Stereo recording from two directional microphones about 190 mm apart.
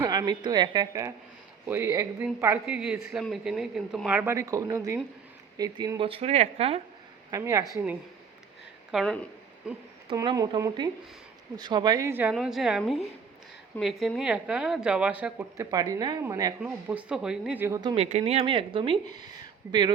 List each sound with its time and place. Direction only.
0.0 s a woman's voice: 20° right (ahead or behind)
7.3 s a woman's voice: 15° right (ahead or behind)
8.9 s a woman's voice: centre (ahead or behind)
10.2 s a woman's voice: 20° right (ahead or behind)
15.7 s speech: 20° right (ahead or behind)
16.9 s a woman's voice: 5° right (ahead or behind)
17.7 s speech: 30° right (ahead or behind)